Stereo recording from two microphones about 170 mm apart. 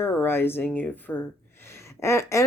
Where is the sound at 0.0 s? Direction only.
10° left (ahead or behind).